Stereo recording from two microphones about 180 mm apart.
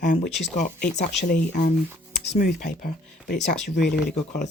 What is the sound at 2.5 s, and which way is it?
Speech, 65° left (ahead or behind).